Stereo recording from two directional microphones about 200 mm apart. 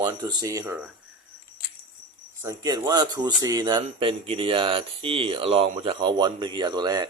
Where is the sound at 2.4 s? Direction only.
20° right (ahead or behind).